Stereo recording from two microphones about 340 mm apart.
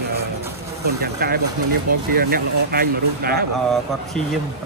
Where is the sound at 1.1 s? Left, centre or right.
Right.